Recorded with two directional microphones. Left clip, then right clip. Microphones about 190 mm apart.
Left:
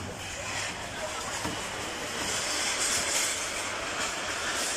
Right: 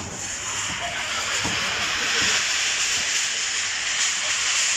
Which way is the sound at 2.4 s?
70° left (ahead or behind).